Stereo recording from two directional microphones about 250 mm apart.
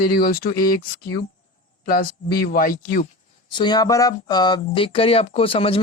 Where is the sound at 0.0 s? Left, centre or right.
Left.